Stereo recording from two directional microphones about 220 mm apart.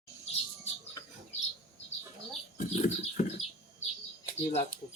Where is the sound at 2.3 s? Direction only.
35° left (ahead or behind).